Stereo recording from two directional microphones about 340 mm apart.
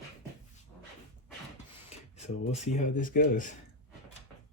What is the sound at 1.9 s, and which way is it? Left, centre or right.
Speech, centre.